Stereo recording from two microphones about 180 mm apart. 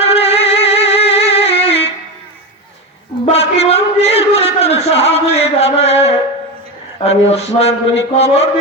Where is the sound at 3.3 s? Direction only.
35° left (ahead or behind).